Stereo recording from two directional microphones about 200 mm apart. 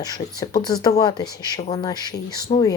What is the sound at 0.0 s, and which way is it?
Speech, 20° left (ahead or behind).